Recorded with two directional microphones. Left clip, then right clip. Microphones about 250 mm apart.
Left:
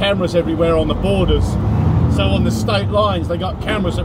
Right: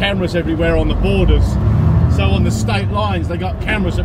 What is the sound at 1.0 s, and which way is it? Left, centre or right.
Speech, left.